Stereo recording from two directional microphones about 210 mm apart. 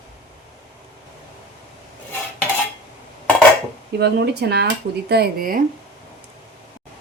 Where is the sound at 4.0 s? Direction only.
55° right (ahead or behind).